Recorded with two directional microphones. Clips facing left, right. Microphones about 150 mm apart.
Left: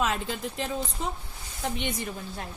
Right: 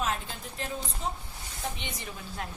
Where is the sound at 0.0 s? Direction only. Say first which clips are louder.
Left 4 dB; 80° left.